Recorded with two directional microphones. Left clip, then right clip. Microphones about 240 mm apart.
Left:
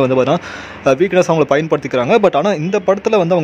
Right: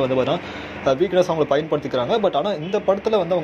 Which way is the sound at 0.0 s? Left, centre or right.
Left.